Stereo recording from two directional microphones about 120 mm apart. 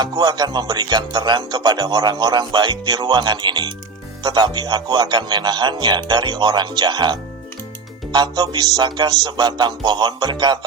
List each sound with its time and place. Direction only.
0.0 s speech: 40° right (ahead or behind)